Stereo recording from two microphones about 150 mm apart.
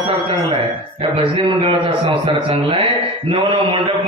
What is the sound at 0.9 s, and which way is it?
A man's voice, 35° right (ahead or behind).